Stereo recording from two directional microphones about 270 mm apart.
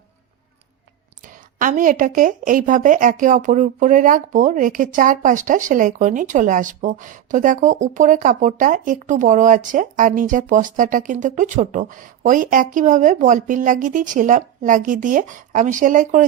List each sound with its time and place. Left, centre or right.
1.5 s speech: right